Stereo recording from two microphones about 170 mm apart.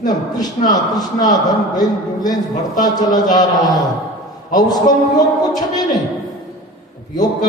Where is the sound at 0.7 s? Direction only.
20° left (ahead or behind).